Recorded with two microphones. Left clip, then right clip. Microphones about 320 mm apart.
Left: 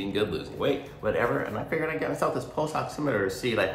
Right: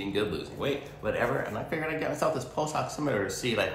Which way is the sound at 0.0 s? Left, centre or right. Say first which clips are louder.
Left 2 dB; centre.